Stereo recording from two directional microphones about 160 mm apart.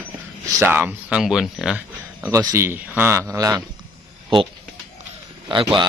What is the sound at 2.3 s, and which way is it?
Speech, 20° right (ahead or behind).